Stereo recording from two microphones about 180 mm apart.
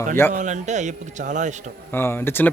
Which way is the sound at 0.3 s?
40° right (ahead or behind).